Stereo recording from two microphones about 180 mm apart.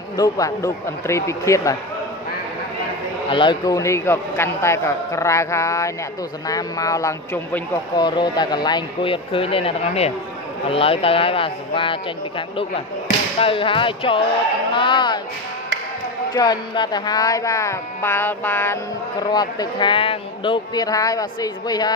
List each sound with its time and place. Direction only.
0.2 s a man's voice: 15° left (ahead or behind)
3.3 s a man's voice: 25° left (ahead or behind)
16.3 s a man's voice: 25° left (ahead or behind)
19.3 s speech: 20° left (ahead or behind)